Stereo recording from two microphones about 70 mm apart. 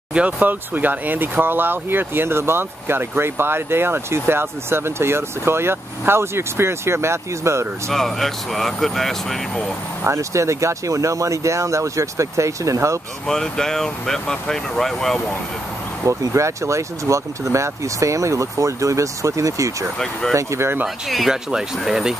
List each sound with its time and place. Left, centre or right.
0.1 s speech: right
7.9 s speech: centre
10.0 s speech: right
13.3 s speech: centre
16.1 s speech: right
20.0 s speech: centre
20.3 s speech: right
21.1 s speech: centre